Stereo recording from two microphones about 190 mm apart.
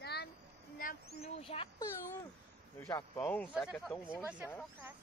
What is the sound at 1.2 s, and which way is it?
Speech, 30° left (ahead or behind).